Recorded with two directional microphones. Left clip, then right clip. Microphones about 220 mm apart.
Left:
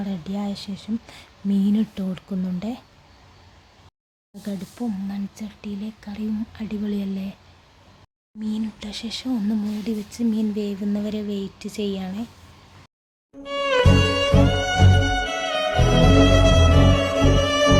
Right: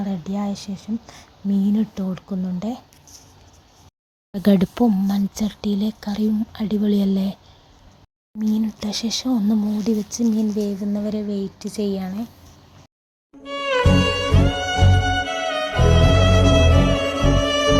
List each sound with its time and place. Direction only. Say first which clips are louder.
0.0 s speech: right 3 dB; 5° right (ahead or behind)
4.3 s speech: right 15 dB; 35° right (ahead or behind)
8.4 s speech: right 6 dB; 25° right (ahead or behind); by 12.2 s 5° right (ahead or behind)
13.4 s music: even; centre (ahead or behind)